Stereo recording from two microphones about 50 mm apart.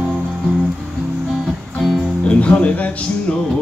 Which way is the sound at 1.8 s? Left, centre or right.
Centre.